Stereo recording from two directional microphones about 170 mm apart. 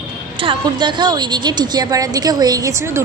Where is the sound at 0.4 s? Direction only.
25° right (ahead or behind).